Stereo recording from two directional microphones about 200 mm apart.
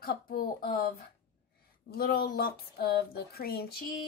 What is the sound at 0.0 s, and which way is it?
Speech, 50° left (ahead or behind).